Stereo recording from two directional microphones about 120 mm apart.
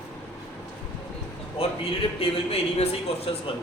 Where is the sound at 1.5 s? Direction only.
55° left (ahead or behind).